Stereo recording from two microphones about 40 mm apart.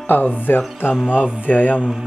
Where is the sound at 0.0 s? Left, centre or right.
Left.